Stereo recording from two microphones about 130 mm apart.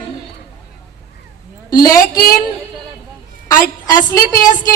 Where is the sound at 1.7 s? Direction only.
25° left (ahead or behind).